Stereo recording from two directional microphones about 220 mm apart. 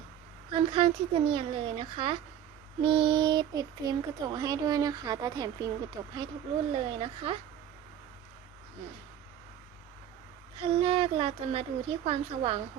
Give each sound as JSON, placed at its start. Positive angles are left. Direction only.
{"t": 0.5, "sound": "speech", "side_deg": -25}
{"t": 10.6, "sound": "speech", "side_deg": -25}